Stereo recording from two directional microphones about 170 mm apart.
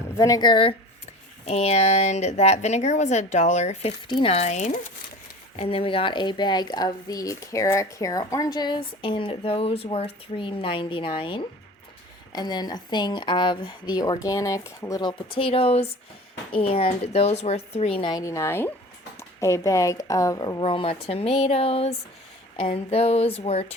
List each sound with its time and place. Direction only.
0.2 s a woman's voice: 20° left (ahead or behind)
18.1 s speech: 20° left (ahead or behind)
20.6 s a woman's voice: 30° left (ahead or behind)